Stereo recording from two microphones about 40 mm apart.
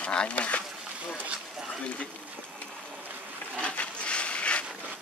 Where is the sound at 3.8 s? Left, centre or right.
Left.